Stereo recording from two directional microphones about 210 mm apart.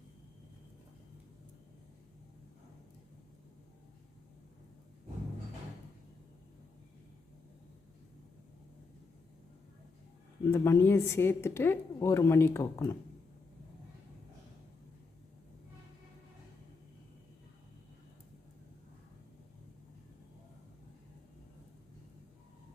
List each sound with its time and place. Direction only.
10.4 s speech: 15° left (ahead or behind)